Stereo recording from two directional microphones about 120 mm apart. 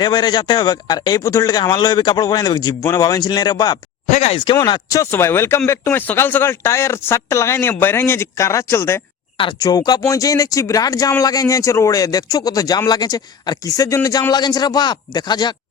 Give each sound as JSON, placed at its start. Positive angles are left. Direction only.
{"t": 0.0, "sound": "speech", "side_deg": 35}
{"t": 4.1, "sound": "speech", "side_deg": 55}
{"t": 4.4, "sound": "speech", "side_deg": 40}
{"t": 5.1, "sound": "speech", "side_deg": 20}
{"t": 9.6, "sound": "speech", "side_deg": 30}